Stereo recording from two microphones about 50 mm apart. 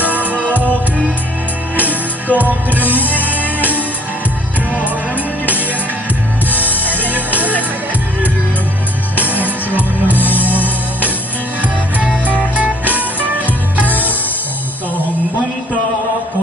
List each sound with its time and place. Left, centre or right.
0.0 s music: right
1.8 s music: right
3.5 s music: left
7.1 s music: right
9.3 s music: right
10.1 s music: left
12.3 s music: right
13.8 s music: left